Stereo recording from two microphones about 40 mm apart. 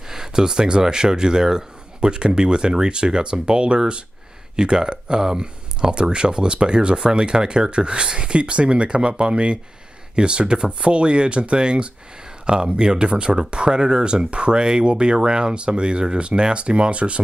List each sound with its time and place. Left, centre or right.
0.1 s speech: centre